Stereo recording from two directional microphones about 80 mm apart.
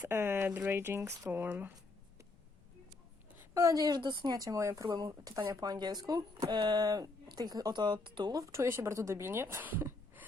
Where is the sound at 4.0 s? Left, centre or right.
Right.